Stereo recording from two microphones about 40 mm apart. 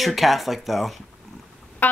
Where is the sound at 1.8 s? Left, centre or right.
Left.